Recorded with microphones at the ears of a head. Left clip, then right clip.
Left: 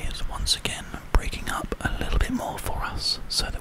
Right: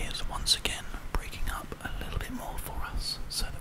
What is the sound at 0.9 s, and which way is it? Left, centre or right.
Whispering, left.